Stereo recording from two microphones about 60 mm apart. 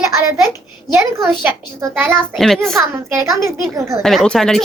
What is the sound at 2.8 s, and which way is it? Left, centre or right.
Speech, right.